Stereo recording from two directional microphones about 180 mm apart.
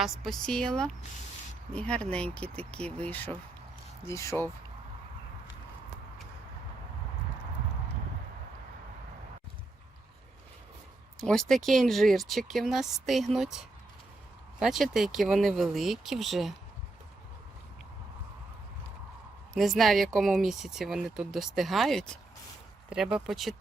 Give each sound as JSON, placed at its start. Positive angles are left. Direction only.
{"t": 0.0, "sound": "speech", "side_deg": 0}
{"t": 11.2, "sound": "speech", "side_deg": 0}
{"t": 19.5, "sound": "speech", "side_deg": 0}